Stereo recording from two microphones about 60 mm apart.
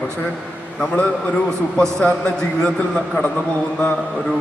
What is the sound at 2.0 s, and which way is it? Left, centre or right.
Speech, left.